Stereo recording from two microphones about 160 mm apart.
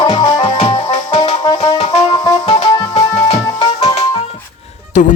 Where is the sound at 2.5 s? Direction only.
35° left (ahead or behind).